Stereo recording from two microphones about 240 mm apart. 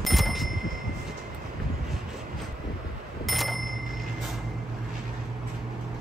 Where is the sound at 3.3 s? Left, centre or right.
Centre.